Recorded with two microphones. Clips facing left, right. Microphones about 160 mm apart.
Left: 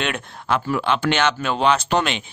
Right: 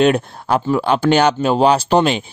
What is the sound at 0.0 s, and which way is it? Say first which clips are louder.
Speech: right 12 dB; 35° right (ahead or behind).